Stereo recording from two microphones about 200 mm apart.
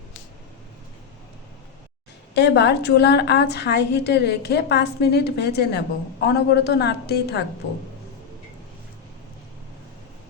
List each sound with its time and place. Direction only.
2.3 s a woman's voice: 60° left (ahead or behind)